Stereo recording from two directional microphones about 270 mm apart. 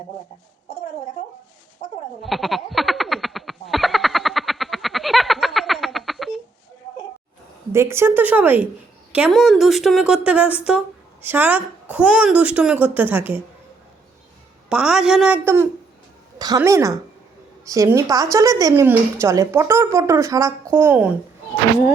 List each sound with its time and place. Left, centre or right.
2.2 s frog: centre
7.7 s a woman's voice: centre
14.7 s a woman's voice: centre